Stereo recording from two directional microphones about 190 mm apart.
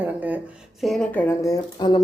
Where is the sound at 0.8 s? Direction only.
Centre (ahead or behind); by 2.0 s 20° left (ahead or behind).